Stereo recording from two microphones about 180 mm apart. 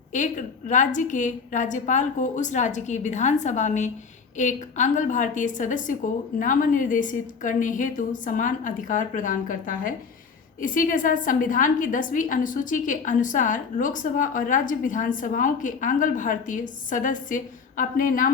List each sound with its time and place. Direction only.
0.1 s a woman's voice: 45° left (ahead or behind)